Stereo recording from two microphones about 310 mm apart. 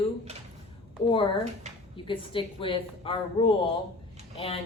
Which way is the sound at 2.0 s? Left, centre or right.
Centre.